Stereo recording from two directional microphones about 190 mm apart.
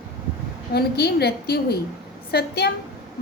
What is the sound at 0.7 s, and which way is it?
A woman's voice, 55° left (ahead or behind).